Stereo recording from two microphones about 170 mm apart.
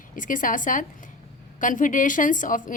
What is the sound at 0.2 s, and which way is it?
A woman's voice, 50° left (ahead or behind).